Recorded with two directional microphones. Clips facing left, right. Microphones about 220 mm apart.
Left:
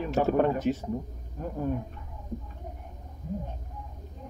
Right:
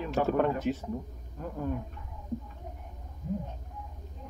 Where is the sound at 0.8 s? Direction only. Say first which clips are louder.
Left 3 dB; 25° left (ahead or behind).